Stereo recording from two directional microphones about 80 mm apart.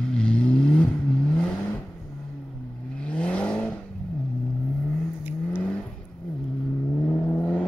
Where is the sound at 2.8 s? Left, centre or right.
Centre.